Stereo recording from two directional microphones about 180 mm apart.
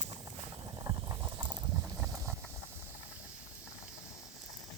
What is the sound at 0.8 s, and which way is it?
Boiling, 20° right (ahead or behind).